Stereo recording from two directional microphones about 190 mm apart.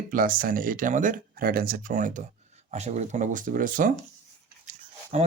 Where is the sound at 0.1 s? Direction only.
45° right (ahead or behind).